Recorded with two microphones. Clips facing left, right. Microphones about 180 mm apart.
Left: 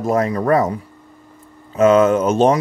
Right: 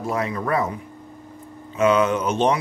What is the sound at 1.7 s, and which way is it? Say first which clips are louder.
Speech: left 6 dB; 45° left (ahead or behind).